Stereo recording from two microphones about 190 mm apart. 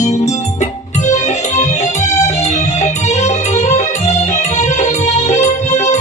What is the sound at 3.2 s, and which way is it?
Music, 35° left (ahead or behind).